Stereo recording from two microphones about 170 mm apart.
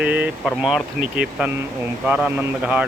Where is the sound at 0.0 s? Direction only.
10° right (ahead or behind).